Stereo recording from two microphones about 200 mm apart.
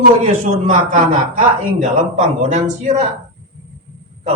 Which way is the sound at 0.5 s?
35° right (ahead or behind).